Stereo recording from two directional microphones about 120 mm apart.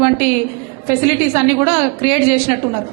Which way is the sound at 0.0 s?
15° right (ahead or behind).